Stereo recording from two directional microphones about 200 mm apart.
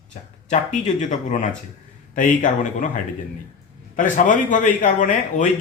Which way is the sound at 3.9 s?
40° left (ahead or behind).